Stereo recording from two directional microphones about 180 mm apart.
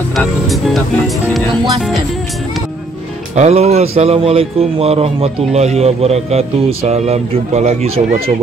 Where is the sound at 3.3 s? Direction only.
35° right (ahead or behind).